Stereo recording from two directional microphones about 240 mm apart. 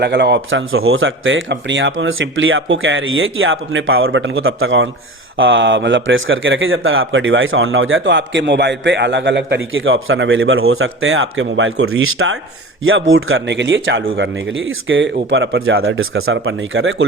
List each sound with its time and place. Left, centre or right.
0.0 s speech: right